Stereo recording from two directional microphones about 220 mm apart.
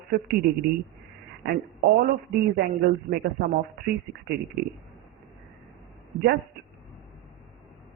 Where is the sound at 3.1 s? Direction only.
45° right (ahead or behind).